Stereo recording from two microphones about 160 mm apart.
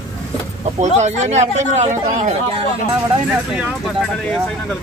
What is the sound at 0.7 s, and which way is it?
Speech, 45° right (ahead or behind).